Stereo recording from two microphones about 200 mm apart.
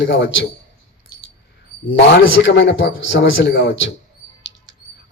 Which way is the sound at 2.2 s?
65° left (ahead or behind).